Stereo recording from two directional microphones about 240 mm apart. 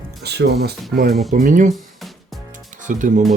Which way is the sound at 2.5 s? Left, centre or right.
Right.